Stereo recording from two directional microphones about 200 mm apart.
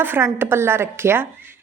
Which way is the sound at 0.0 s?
10° right (ahead or behind).